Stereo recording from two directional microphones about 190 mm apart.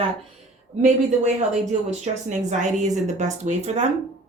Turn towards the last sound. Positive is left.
turn(degrees=-35)  # may be behind; listen again after turning